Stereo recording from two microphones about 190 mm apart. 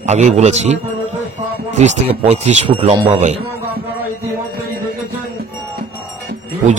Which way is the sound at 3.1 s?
35° right (ahead or behind).